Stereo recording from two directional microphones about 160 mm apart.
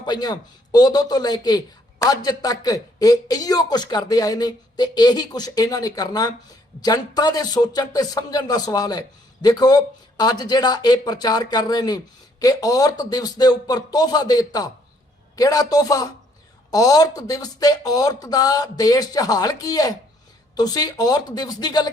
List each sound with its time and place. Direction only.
0.0 s speech: 25° left (ahead or behind)